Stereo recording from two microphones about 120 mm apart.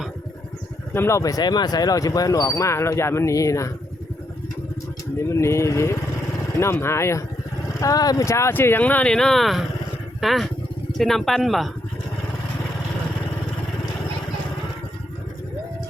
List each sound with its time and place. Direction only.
0.9 s speech: 25° left (ahead or behind)
5.2 s speech: 25° left (ahead or behind); by 11.7 s centre (ahead or behind)